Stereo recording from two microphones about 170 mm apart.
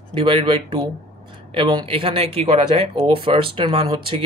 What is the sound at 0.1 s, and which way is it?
Speech, 30° right (ahead or behind).